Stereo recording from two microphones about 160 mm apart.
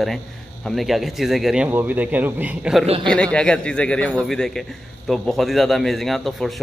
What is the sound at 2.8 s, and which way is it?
Speech, 35° right (ahead or behind).